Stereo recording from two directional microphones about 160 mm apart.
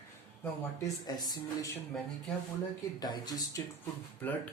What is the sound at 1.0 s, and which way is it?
Speech, 25° left (ahead or behind).